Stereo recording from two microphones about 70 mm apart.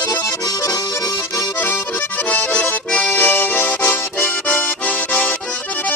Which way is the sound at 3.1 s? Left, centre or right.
Left.